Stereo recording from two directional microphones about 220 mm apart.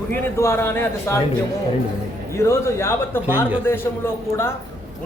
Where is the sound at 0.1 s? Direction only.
10° left (ahead or behind).